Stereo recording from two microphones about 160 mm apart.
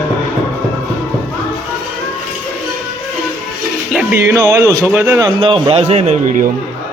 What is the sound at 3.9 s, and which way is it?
A man's voice, 15° right (ahead or behind).